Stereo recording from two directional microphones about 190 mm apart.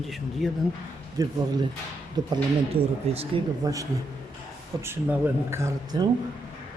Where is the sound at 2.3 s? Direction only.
30° right (ahead or behind).